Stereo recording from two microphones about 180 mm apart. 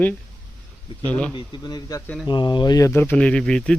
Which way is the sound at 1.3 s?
25° left (ahead or behind).